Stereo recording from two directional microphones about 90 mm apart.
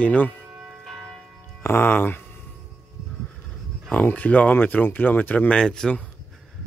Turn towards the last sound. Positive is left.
turn(degrees=5)  # may be behind; listen again after turning